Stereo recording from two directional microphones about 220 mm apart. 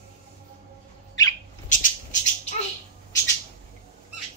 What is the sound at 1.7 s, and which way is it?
Squawk, 35° left (ahead or behind).